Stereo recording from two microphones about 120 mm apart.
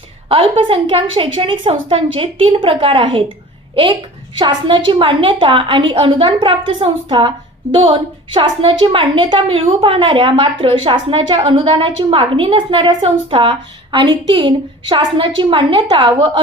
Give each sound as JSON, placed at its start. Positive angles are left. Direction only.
{"t": 0.3, "sound": "a woman's voice", "side_deg": -50}
{"t": 4.4, "sound": "a woman's voice", "side_deg": -40}
{"t": 13.0, "sound": "a woman's voice", "side_deg": -50}